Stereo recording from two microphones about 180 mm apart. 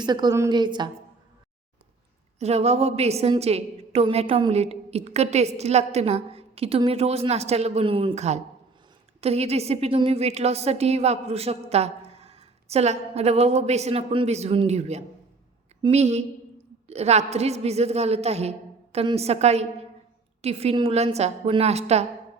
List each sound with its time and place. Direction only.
0.0 s a woman's voice: 25° right (ahead or behind)
2.4 s a woman's voice: 35° right (ahead or behind)